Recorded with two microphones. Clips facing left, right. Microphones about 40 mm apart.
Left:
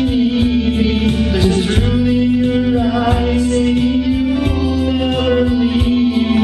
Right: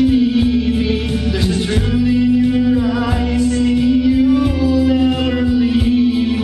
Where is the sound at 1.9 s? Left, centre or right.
Centre.